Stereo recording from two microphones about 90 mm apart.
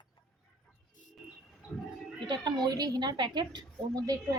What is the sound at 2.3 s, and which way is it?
A woman's voice, 50° right (ahead or behind).